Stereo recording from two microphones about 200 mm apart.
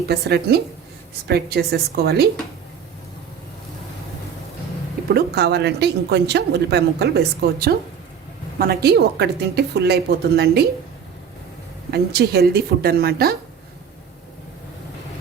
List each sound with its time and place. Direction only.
0.1 s a woman's voice: 55° right (ahead or behind)
5.0 s speech: 55° right (ahead or behind)
11.9 s a woman's voice: 55° right (ahead or behind)